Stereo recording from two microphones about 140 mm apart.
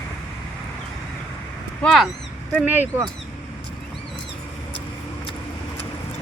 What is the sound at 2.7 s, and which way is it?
Speech, 15° right (ahead or behind).